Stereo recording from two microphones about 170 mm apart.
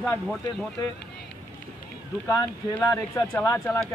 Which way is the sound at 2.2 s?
15° left (ahead or behind).